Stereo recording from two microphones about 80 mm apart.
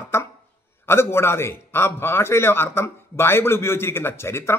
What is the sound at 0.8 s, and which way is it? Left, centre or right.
A man's voice, left.